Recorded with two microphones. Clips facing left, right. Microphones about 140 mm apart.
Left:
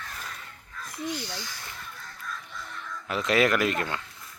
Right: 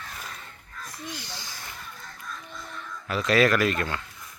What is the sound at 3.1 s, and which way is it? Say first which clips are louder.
Speech: right 2 dB; 20° left (ahead or behind).